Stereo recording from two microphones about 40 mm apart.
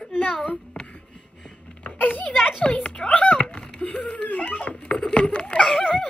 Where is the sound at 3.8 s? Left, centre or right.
Left.